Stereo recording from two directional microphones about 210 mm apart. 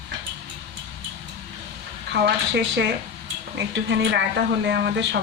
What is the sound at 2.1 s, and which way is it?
Speech, 55° right (ahead or behind).